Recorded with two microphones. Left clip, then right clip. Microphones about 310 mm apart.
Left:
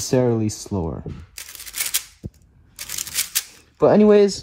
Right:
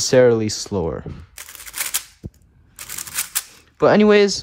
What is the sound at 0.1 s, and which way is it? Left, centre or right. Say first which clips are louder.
Speech: right 6 dB; left.